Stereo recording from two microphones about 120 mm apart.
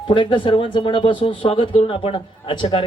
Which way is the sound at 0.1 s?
40° left (ahead or behind).